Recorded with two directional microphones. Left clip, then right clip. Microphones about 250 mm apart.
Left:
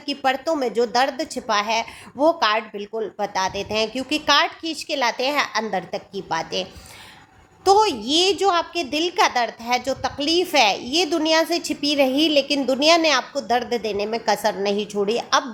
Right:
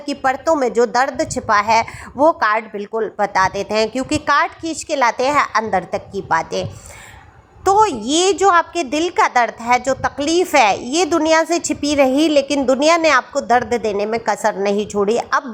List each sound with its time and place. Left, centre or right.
0.0 s a woman's voice: centre
7.6 s a woman's voice: centre